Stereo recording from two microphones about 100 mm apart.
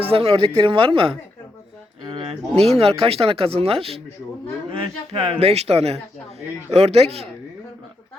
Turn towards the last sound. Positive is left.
turn(degrees=-90)